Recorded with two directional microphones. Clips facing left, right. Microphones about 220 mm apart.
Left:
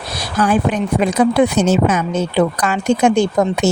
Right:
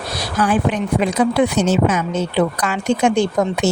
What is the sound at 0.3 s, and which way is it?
A woman's voice, 45° left (ahead or behind).